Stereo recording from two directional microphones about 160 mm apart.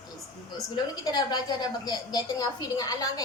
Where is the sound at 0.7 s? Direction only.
25° left (ahead or behind).